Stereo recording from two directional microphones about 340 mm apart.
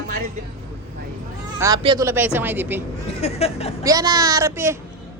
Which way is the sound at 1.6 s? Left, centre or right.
Centre.